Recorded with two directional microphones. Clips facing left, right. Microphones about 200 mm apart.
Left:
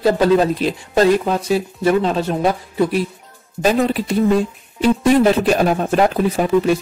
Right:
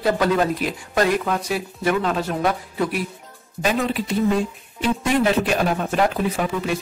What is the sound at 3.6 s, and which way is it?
Speech, 40° left (ahead or behind).